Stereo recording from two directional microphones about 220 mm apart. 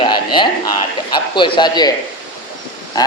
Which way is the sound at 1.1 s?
20° left (ahead or behind).